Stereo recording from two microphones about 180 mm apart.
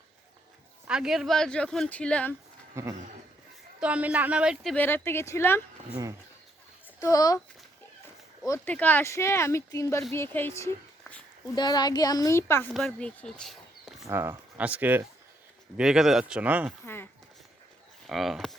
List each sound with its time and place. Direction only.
0.9 s speech: 5° right (ahead or behind)
2.8 s speech: 15° right (ahead or behind)
4.7 s a woman's voice: 10° left (ahead or behind)
7.0 s speech: 20° left (ahead or behind)
8.4 s a woman's voice: 10° left (ahead or behind)
14.1 s speech: 15° right (ahead or behind)
16.8 s a woman's voice: 10° left (ahead or behind)
18.1 s speech: centre (ahead or behind)